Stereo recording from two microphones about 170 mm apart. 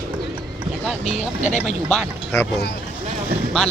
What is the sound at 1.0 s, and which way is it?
Speech, 45° left (ahead or behind).